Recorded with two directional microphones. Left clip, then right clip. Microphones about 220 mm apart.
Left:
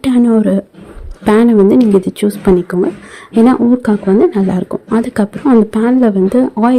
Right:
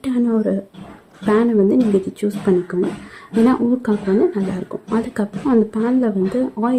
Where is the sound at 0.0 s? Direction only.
35° left (ahead or behind).